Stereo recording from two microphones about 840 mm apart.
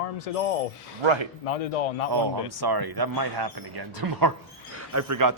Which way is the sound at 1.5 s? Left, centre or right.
Left.